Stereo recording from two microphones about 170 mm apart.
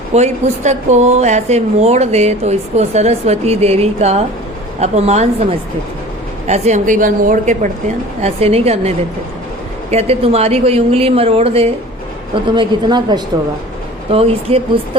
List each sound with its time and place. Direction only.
0.1 s a woman's voice: 40° right (ahead or behind)
9.9 s a woman's voice: 40° right (ahead or behind)